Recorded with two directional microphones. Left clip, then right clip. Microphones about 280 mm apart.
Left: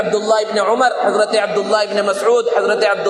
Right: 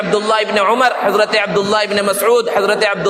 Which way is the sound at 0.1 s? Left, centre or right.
Right.